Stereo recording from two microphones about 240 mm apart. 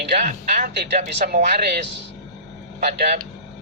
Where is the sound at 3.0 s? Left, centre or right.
Right.